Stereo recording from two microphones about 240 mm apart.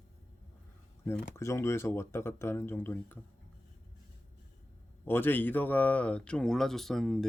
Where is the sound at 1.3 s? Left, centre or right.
Centre.